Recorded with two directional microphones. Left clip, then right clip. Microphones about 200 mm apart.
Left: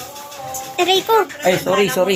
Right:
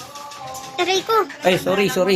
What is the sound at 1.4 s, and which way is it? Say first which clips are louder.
Speech: left 2 dB; 45° right (ahead or behind).